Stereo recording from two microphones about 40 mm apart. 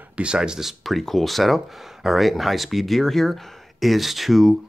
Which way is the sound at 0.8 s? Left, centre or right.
Centre.